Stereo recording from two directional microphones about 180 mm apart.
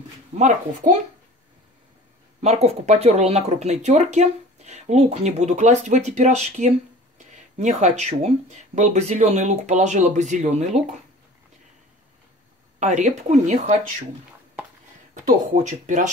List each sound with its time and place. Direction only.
0.3 s speech: 35° right (ahead or behind)
0.8 s speech: 45° right (ahead or behind)
2.4 s speech: 40° right (ahead or behind)
12.7 s speech: 40° right (ahead or behind)
15.2 s speech: 45° right (ahead or behind)